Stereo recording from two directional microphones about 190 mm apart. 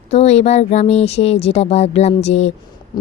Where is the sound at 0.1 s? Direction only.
35° left (ahead or behind).